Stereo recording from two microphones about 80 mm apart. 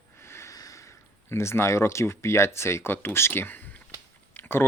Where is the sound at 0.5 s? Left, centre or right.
Left.